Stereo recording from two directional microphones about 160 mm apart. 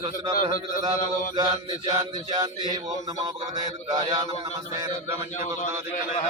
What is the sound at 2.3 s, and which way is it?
Mantra, 25° right (ahead or behind).